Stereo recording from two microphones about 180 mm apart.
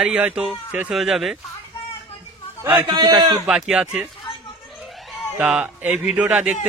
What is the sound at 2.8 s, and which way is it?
Speech, 25° right (ahead or behind).